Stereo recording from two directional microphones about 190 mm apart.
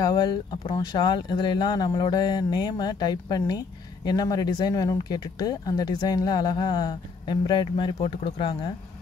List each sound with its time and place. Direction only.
0.0 s speech: 20° left (ahead or behind)